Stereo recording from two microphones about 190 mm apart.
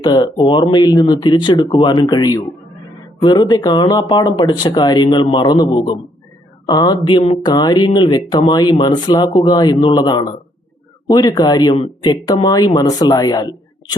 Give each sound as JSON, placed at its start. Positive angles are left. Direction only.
{"t": 0.0, "sound": "speech", "side_deg": 20}